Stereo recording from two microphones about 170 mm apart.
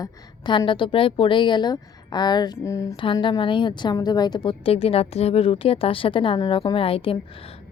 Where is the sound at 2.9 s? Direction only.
30° left (ahead or behind).